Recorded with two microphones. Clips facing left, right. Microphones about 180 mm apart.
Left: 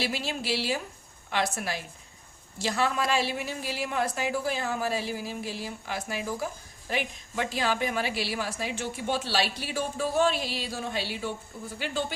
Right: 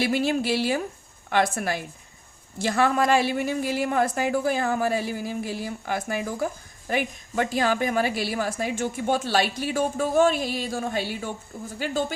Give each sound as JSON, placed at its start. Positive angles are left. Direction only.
{"t": 0.0, "sound": "a woman's voice", "side_deg": -55}